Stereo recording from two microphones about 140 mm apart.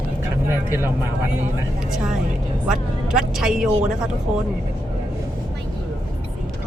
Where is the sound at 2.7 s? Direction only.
5° right (ahead or behind).